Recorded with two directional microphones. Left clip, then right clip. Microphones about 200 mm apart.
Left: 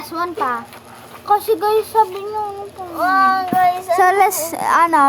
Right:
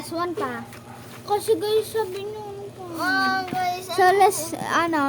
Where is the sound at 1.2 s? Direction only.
20° left (ahead or behind).